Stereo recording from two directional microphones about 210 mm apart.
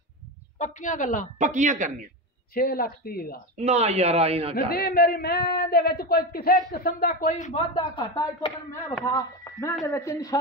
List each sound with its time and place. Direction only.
0.6 s a man's voice: 35° left (ahead or behind)
1.4 s speech: 35° right (ahead or behind)
2.5 s speech: 45° left (ahead or behind)
3.5 s speech: 30° right (ahead or behind)
4.6 s a man's voice: 45° left (ahead or behind); by 10.4 s 15° left (ahead or behind)